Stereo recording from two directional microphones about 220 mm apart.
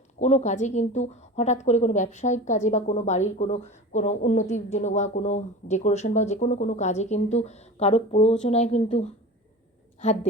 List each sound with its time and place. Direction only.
0.2 s speech: 30° left (ahead or behind)